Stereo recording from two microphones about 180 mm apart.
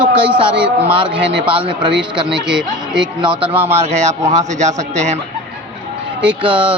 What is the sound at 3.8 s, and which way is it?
A man's voice, 40° right (ahead or behind).